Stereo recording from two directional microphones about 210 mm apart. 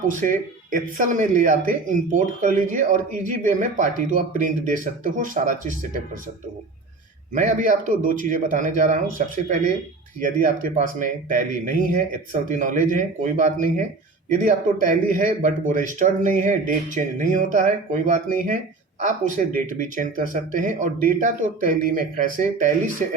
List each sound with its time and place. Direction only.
0.2 s speech: 40° right (ahead or behind)
7.3 s speech: 40° right (ahead or behind)